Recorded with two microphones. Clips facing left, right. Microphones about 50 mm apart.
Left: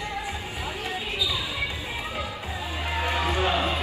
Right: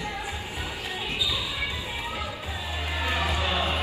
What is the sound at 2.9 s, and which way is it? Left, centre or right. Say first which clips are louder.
Music: left 2 dB; left.